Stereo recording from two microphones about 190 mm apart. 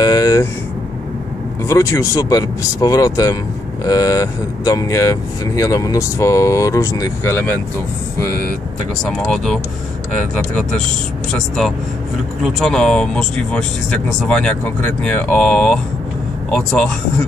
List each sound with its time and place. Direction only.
0.0 s air conditioning: 20° left (ahead or behind)
1.7 s speech: 15° left (ahead or behind)
9.0 s speech: 5° left (ahead or behind)